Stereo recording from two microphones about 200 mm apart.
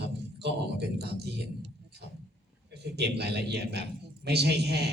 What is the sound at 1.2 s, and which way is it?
Speech, 55° right (ahead or behind).